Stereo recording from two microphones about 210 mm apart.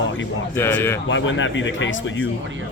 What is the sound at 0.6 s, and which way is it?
Speech, 10° left (ahead or behind).